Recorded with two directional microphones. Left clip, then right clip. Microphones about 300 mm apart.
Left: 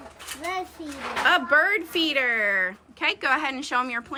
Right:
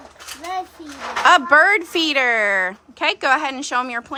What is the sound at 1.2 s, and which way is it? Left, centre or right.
A woman's voice, centre.